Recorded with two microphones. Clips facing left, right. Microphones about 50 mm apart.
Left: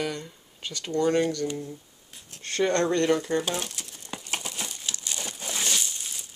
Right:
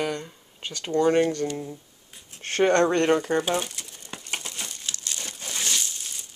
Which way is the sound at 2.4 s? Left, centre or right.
Right.